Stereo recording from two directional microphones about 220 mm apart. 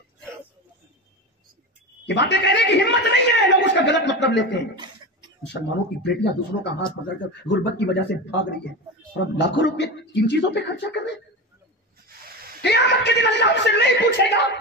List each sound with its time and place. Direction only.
2.0 s a man's voice: 50° left (ahead or behind)
6.0 s a man's voice: 50° left (ahead or behind)
12.6 s a man's voice: 50° left (ahead or behind)